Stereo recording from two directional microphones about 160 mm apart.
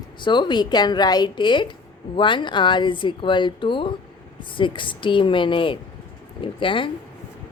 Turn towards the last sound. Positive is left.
turn(degrees=30)  # may be behind; listen again after turning